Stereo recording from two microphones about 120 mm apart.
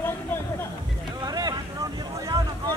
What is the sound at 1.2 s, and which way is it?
Boat, 35° right (ahead or behind).